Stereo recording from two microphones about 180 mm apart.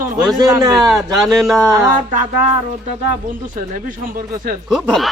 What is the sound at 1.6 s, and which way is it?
Speech, 15° right (ahead or behind).